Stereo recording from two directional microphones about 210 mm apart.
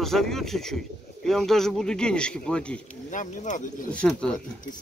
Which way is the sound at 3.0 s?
35° left (ahead or behind).